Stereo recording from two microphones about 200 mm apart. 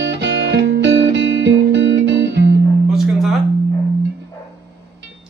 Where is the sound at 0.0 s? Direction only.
60° right (ahead or behind).